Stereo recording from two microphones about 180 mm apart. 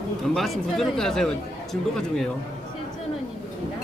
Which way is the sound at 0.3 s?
Centre (ahead or behind).